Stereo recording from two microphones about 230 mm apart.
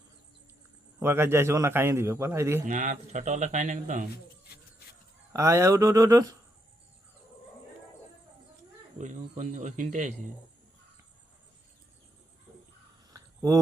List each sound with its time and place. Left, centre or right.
0.9 s a man's voice: centre
2.6 s speech: right
5.3 s a man's voice: centre
9.0 s speech: right
13.1 s a sound: centre